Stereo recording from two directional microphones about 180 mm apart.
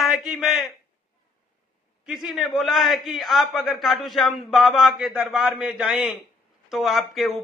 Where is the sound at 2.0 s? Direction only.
Centre (ahead or behind).